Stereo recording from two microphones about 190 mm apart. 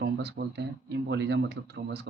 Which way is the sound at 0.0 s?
60° right (ahead or behind).